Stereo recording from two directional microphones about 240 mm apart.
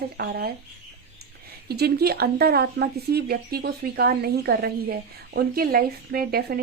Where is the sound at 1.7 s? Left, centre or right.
Right.